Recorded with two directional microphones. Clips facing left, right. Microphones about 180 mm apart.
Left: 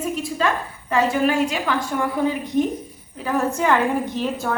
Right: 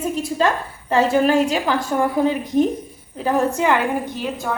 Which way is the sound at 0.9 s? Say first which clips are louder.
Right 3 dB; 35° right (ahead or behind).